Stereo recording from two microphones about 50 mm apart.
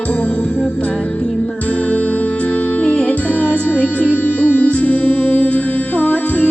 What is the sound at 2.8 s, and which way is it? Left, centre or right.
Music, left.